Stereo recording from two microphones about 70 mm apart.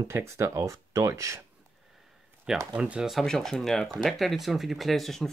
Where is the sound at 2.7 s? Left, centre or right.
Centre.